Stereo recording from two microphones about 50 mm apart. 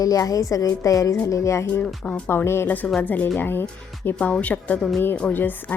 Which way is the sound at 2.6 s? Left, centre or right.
Left.